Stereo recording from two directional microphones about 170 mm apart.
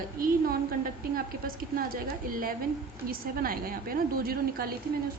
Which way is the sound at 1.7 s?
55° right (ahead or behind).